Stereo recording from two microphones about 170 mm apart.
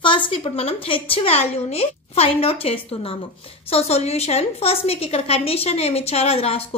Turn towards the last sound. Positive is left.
turn(degrees=35)  # may be behind; listen again after turning